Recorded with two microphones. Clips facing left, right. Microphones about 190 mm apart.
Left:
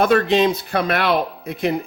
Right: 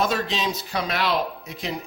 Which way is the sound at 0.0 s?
60° left (ahead or behind).